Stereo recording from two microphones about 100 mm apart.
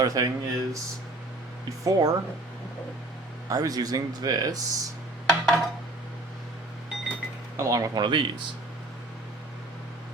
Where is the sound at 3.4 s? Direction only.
35° right (ahead or behind).